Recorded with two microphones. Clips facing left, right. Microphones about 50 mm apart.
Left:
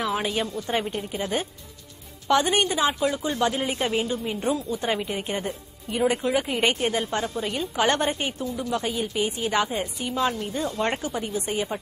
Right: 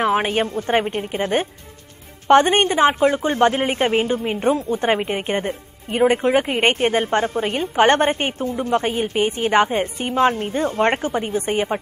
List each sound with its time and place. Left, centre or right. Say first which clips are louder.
0.0 s a woman's voice: right 7 dB; right